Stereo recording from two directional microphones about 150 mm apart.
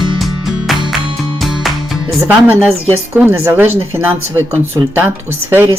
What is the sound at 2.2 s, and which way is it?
A woman's voice, 15° right (ahead or behind).